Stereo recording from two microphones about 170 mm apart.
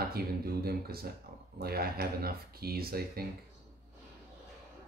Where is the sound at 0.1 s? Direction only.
65° right (ahead or behind).